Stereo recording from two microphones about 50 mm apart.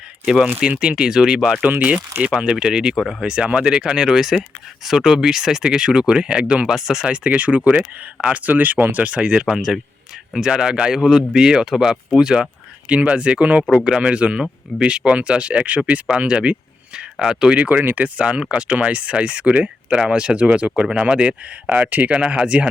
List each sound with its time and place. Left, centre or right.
0.8 s speech: centre
2.9 s speech: centre
3.2 s speech: centre
7.3 s speech: right
9.5 s speech: centre
17.6 s speech: right
22.2 s speech: centre